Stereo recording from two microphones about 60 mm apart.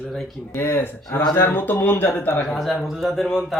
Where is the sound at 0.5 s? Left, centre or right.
Left.